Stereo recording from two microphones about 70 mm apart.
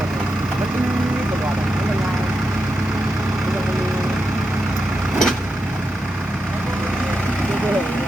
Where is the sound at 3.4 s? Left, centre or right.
Centre.